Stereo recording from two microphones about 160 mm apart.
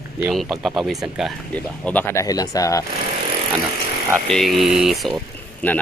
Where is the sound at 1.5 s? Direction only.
10° left (ahead or behind).